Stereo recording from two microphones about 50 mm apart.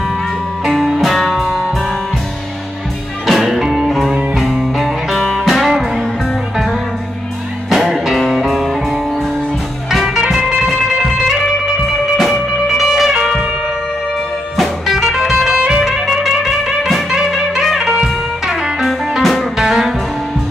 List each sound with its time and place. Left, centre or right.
1.0 s music: centre
3.3 s music: centre
4.1 s music: right
4.4 s music: centre
9.9 s music: centre
11.2 s music: centre
14.6 s music: centre
15.8 s music: centre